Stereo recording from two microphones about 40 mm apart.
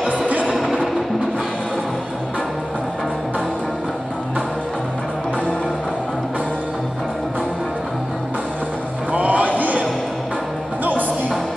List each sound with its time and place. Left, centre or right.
0.3 s music: right
9.1 s music: right
10.8 s music: right